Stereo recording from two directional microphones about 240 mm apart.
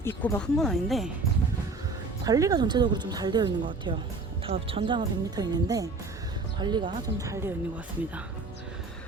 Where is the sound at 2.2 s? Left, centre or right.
Centre.